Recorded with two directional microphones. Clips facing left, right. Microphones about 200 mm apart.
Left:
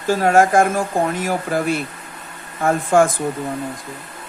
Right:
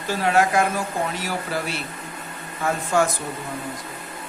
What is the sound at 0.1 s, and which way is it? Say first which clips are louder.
Speech: left 6 dB; 45° left (ahead or behind).